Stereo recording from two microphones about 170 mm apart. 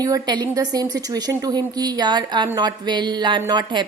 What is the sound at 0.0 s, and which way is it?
A woman's voice, 25° right (ahead or behind).